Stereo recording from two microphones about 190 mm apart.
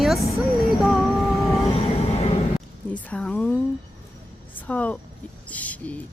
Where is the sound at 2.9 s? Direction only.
5° left (ahead or behind).